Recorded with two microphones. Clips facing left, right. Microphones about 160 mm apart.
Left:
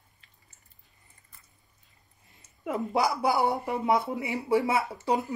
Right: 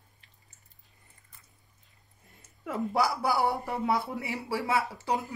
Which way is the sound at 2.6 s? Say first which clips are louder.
Left 1 dB; 20° left (ahead or behind).